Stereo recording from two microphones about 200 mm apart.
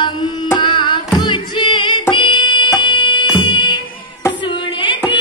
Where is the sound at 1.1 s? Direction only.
25° left (ahead or behind).